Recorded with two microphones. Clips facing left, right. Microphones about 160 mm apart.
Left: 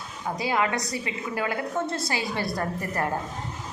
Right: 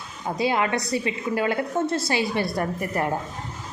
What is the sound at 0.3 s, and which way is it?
A woman's voice, 20° right (ahead or behind).